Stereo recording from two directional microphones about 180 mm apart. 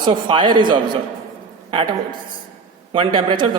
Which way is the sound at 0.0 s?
25° right (ahead or behind).